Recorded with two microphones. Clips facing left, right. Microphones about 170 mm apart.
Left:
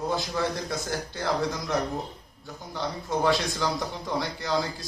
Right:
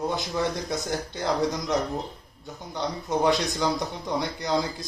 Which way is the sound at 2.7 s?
20° right (ahead or behind).